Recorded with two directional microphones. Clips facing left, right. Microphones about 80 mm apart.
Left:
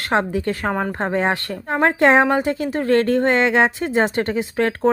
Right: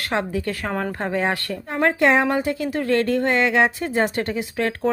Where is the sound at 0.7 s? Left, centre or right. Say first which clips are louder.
Left 2 dB; centre.